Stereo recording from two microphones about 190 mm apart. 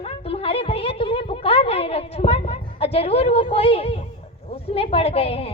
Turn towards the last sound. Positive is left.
turn(degrees=30)  # may be behind; listen again after turning